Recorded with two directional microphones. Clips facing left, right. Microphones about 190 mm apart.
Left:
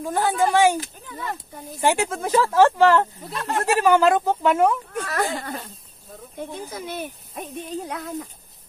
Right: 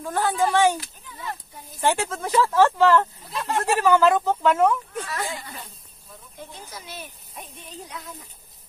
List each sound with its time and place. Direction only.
0.0 s speech: 10° left (ahead or behind)
0.7 s speech: 55° left (ahead or behind)
1.8 s speech: 10° left (ahead or behind)
3.3 s speech: centre (ahead or behind)
4.9 s speech: 60° left (ahead or behind)
5.3 s speech: 45° left (ahead or behind)
6.5 s speech: 55° left (ahead or behind)